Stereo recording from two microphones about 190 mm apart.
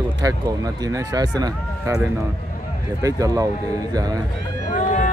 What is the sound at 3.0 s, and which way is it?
Speech, 15° right (ahead or behind).